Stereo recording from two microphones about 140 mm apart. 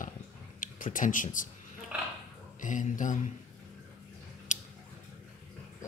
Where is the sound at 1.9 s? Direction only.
10° right (ahead or behind).